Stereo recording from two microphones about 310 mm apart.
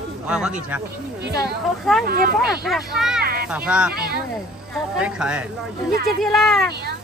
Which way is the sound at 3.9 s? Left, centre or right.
Right.